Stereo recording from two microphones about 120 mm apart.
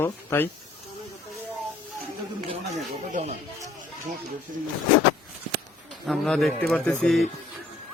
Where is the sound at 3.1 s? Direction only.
75° right (ahead or behind).